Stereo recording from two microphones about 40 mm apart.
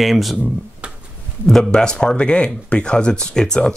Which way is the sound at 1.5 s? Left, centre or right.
Centre.